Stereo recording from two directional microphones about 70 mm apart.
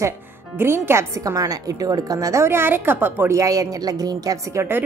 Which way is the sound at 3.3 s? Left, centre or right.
Right.